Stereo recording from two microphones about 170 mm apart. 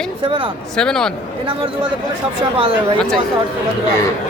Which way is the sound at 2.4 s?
30° right (ahead or behind).